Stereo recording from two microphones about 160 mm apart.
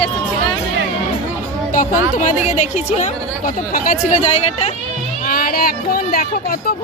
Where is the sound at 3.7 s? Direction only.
55° left (ahead or behind).